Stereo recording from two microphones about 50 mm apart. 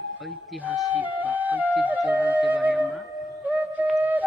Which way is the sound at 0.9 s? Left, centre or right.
Right.